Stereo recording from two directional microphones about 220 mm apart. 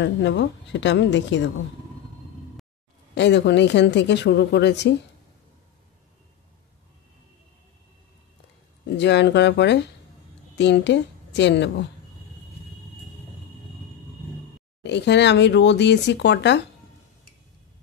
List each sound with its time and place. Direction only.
0.0 s speech: 50° left (ahead or behind)
3.2 s speech: 50° left (ahead or behind)
8.9 s a woman's voice: 50° left (ahead or behind)
14.8 s speech: 50° left (ahead or behind)